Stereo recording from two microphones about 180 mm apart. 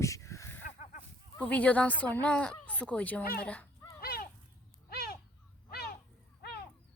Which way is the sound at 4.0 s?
55° left (ahead or behind).